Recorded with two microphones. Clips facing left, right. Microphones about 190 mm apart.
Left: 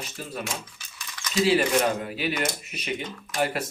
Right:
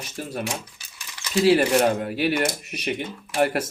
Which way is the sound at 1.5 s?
45° right (ahead or behind).